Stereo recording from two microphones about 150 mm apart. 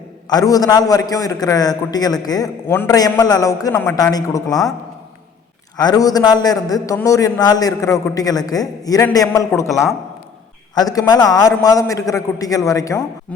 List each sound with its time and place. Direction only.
0.3 s a man's voice: 25° left (ahead or behind)
5.7 s a man's voice: 25° left (ahead or behind)
9.6 s speech: centre (ahead or behind)
10.8 s a man's voice: 25° left (ahead or behind)